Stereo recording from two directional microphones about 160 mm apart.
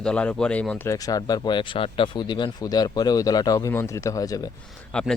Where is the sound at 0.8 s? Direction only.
20° left (ahead or behind).